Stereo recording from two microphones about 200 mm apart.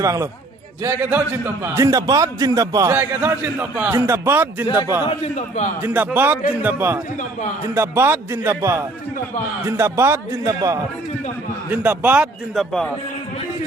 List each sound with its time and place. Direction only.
0.0 s a man's voice: 15° right (ahead or behind)
5.0 s a man's voice: 35° left (ahead or behind)
5.8 s a man's voice: 10° right (ahead or behind)